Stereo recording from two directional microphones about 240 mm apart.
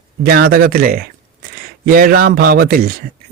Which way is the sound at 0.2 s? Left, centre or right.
Right.